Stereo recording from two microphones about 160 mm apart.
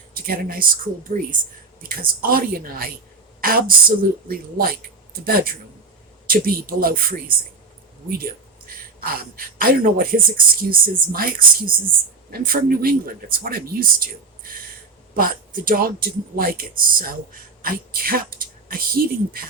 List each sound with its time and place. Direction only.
0.3 s speech: 65° right (ahead or behind)